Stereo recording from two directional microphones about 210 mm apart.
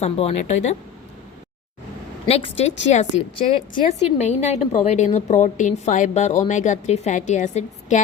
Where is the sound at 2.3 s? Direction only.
30° left (ahead or behind).